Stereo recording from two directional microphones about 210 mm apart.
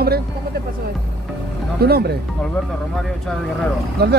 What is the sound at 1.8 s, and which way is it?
Speech, 50° right (ahead or behind).